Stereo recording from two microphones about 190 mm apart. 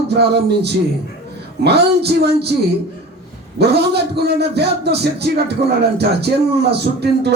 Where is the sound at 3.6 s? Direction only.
60° right (ahead or behind).